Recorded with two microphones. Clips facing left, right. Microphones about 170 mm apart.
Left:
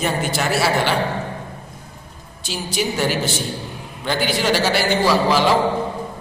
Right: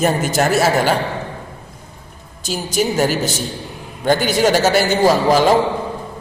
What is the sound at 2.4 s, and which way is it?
A man's voice, 45° right (ahead or behind).